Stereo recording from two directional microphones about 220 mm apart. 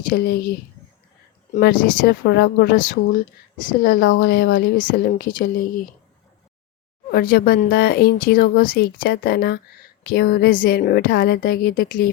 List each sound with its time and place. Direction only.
0.1 s speech: 45° left (ahead or behind)
1.5 s speech: 45° left (ahead or behind)
7.1 s speech: 45° left (ahead or behind)